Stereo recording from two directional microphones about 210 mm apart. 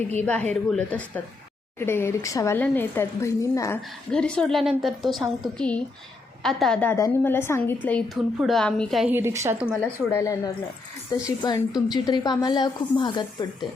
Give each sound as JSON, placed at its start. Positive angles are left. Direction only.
{"t": 0.2, "sound": "a woman's voice", "side_deg": 5}
{"t": 4.1, "sound": "a woman's voice", "side_deg": 5}
{"t": 9.8, "sound": "a woman's voice", "side_deg": 10}